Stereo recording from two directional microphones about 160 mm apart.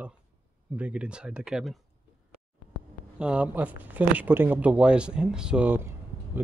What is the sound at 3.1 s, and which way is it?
Speech, 10° right (ahead or behind).